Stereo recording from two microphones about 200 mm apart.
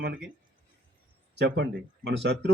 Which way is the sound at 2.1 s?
60° right (ahead or behind).